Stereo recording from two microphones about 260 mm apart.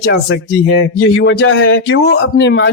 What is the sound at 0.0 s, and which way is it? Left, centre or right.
Speech, left.